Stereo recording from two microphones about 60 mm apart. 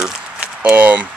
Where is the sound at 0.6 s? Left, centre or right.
Right.